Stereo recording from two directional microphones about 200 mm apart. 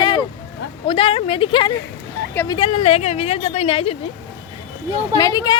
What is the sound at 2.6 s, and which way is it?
Speech, 30° left (ahead or behind).